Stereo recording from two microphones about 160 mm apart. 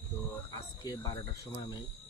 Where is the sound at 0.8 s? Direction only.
25° left (ahead or behind).